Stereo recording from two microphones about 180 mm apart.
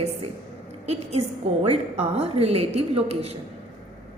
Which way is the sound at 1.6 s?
35° right (ahead or behind).